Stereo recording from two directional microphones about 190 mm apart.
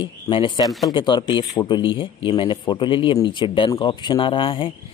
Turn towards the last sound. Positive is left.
turn(degrees=25)  # may be behind; listen again after turning